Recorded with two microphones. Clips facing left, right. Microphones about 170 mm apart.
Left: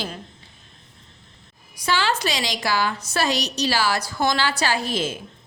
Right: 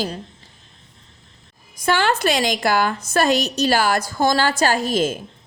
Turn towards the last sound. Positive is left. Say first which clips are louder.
# right 5 dB
turn(degrees=-45)  # may be behind; listen again after turning